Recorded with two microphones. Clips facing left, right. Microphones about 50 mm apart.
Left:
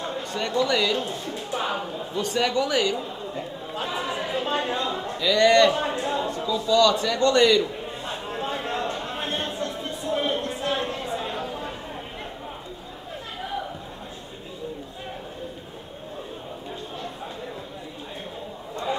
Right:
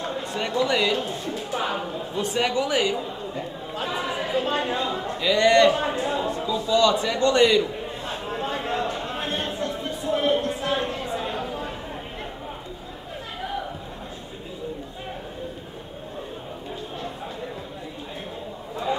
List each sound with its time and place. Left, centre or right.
0.0 s a man's voice: centre
2.1 s speech: centre
3.0 s speech: centre
5.2 s a man's voice: centre
5.8 s speech: centre
8.1 s a sound: centre